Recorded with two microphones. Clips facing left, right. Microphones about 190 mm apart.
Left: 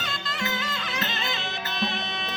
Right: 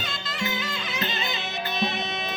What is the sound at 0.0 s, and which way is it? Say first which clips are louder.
Music: right 1 dB; centre (ahead or behind).